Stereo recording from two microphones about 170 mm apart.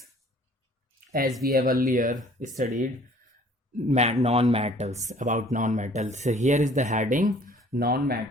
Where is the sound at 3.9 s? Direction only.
40° right (ahead or behind).